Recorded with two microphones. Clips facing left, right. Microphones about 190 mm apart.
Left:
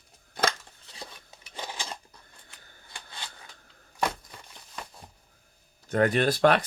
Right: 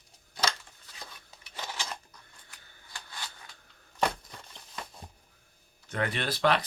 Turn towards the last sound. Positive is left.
turn(degrees=45)  # may be behind; listen again after turning